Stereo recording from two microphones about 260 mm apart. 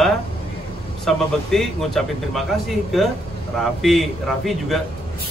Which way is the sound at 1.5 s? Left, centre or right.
Centre.